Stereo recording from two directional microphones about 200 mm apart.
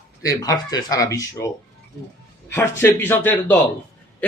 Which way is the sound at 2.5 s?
10° left (ahead or behind).